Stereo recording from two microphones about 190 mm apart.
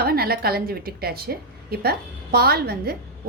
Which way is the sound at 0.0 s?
55° right (ahead or behind).